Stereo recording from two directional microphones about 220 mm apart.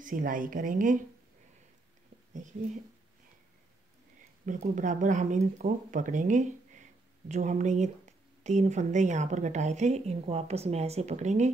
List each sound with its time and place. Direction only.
0.0 s speech: 40° right (ahead or behind)
2.3 s speech: 35° right (ahead or behind)
4.5 s speech: 35° right (ahead or behind)